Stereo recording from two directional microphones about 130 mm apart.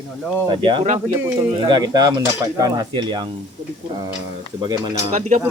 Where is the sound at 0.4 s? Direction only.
35° right (ahead or behind).